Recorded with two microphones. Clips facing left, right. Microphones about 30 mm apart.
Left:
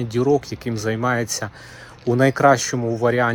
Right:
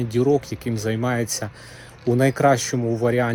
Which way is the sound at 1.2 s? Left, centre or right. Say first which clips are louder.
Left 1 dB; left.